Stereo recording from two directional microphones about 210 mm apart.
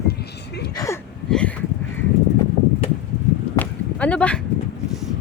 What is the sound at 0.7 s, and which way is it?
Speech, 15° left (ahead or behind).